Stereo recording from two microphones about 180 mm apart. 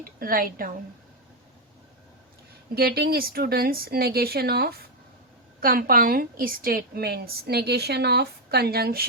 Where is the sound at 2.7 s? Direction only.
60° right (ahead or behind).